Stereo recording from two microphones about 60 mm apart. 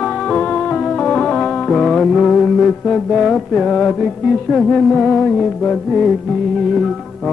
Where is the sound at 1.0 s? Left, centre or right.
Centre.